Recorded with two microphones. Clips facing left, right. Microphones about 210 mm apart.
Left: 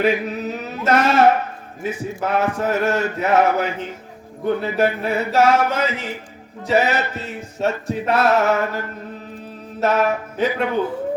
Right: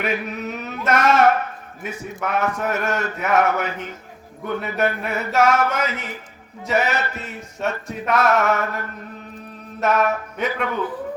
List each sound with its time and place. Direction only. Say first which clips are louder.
0.0 s music: left 5 dB; 30° left (ahead or behind)
9.8 s music: left 1 dB; 30° left (ahead or behind)